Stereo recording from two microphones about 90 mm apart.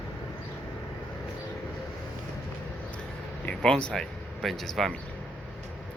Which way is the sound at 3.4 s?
10° left (ahead or behind).